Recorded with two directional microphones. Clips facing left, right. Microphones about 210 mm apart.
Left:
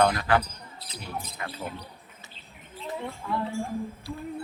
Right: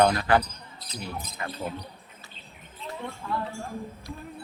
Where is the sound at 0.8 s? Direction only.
30° left (ahead or behind).